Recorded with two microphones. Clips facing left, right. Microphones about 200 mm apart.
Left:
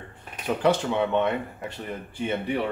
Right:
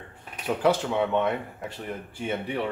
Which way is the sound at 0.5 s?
5° right (ahead or behind).